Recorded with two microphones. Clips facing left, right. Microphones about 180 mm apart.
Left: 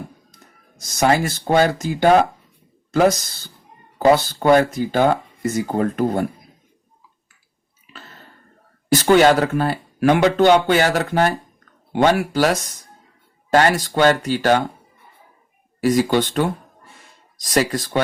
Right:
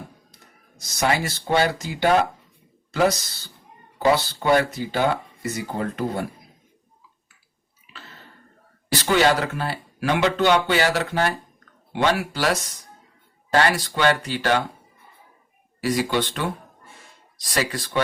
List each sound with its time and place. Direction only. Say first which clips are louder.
0.8 s speech: left 5 dB; 45° left (ahead or behind)
3.9 s speech: left 5 dB; 50° left (ahead or behind)
8.9 s speech: left 6 dB; 45° left (ahead or behind)
15.8 s speech: left 6 dB; 45° left (ahead or behind)